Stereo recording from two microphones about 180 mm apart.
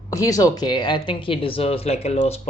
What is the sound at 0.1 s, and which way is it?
A woman's voice, 20° left (ahead or behind).